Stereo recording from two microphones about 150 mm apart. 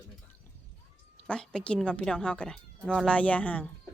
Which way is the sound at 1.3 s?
5° left (ahead or behind).